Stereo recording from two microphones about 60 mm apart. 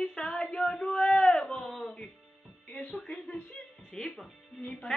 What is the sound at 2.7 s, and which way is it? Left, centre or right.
Speech, centre.